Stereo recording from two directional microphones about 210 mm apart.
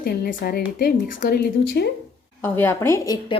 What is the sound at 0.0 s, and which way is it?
A woman's voice, 45° left (ahead or behind).